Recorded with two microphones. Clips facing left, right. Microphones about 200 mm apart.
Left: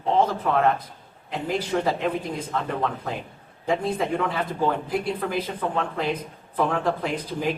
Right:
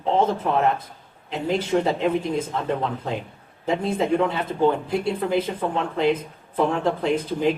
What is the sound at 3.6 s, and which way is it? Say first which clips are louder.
Speech: right 2 dB; 25° right (ahead or behind).